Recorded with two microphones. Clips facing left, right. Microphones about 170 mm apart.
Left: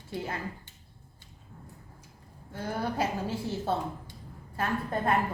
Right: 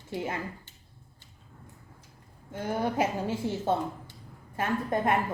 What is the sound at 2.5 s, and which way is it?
A woman's voice, 15° right (ahead or behind).